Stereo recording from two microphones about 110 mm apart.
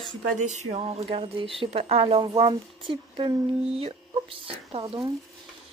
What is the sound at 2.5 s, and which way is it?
Speech, 50° right (ahead or behind).